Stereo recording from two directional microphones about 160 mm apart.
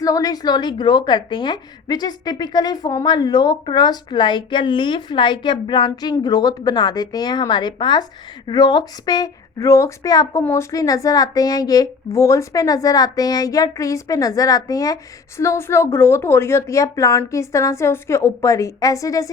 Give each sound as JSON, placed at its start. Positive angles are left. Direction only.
{"t": 0.0, "sound": "a woman's voice", "side_deg": 20}